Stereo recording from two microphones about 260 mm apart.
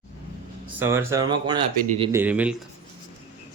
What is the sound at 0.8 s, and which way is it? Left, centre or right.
Speech, centre.